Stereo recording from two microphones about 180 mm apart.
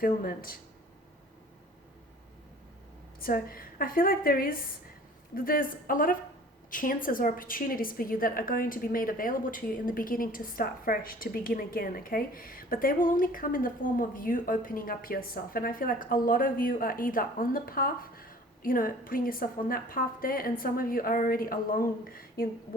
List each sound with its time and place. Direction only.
0.0 s a woman's voice: 55° left (ahead or behind)
3.2 s a woman's voice: 55° left (ahead or behind)